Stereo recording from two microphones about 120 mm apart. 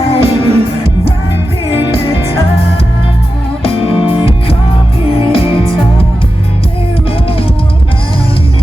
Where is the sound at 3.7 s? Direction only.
50° left (ahead or behind).